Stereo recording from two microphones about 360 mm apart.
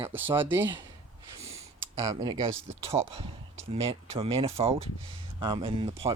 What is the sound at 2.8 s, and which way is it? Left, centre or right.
Speech, centre.